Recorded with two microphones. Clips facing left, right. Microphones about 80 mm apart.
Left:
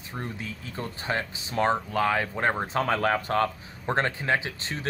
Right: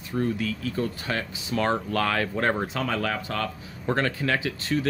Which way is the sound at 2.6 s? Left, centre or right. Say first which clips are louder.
Left 3 dB; left.